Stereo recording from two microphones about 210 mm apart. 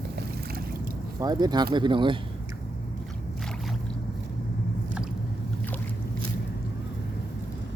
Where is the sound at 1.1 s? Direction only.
20° right (ahead or behind).